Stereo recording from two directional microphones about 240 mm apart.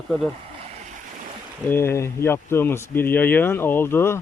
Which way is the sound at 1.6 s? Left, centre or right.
Centre.